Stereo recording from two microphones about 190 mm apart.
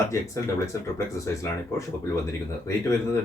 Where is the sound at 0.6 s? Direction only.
15° left (ahead or behind).